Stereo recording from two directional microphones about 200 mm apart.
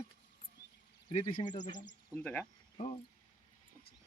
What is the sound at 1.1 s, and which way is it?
Speech, 25° left (ahead or behind).